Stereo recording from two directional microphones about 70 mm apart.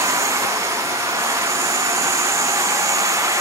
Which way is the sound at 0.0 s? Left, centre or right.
Right.